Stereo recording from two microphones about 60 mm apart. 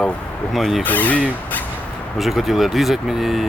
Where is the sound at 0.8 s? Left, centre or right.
Left.